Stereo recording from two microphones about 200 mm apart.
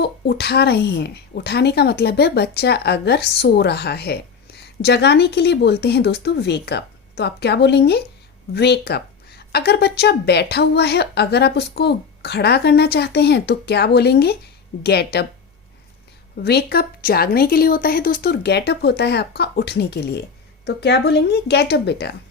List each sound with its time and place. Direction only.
0.0 s a woman's voice: 55° left (ahead or behind)
16.4 s a woman's voice: 50° left (ahead or behind)